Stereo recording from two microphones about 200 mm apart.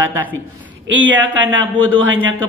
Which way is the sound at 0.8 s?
70° right (ahead or behind).